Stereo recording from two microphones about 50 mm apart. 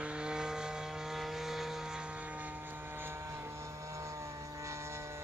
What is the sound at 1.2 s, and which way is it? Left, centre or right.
Vehicle, centre.